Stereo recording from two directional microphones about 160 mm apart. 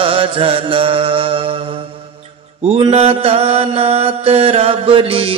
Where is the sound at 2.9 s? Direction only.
40° right (ahead or behind).